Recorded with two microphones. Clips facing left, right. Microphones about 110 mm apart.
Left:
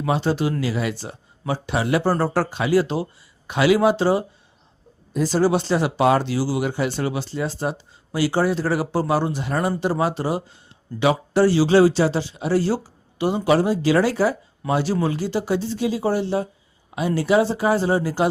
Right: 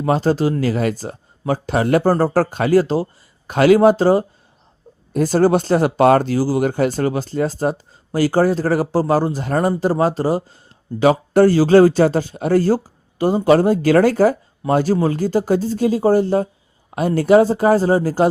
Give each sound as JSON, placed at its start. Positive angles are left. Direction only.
{"t": 0.0, "sound": "speech", "side_deg": -40}